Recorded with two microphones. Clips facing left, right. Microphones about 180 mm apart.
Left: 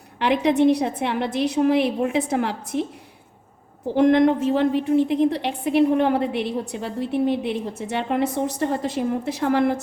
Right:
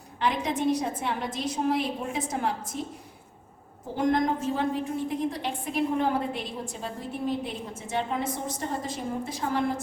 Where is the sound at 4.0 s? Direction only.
70° left (ahead or behind).